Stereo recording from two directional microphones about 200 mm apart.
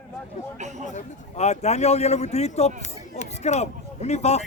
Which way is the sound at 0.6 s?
35° right (ahead or behind).